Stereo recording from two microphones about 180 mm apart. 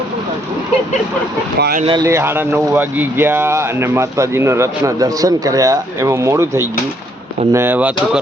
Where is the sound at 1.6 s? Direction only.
55° right (ahead or behind).